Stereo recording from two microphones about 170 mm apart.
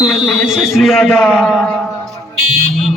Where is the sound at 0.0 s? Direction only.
Centre (ahead or behind).